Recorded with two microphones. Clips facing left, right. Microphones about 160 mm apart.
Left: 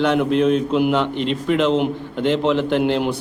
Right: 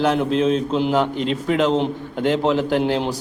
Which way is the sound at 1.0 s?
45° right (ahead or behind).